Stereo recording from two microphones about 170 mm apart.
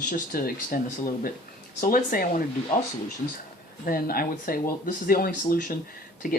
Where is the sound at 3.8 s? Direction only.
60° left (ahead or behind).